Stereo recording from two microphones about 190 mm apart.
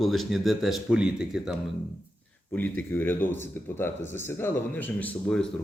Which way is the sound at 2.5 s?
10° left (ahead or behind).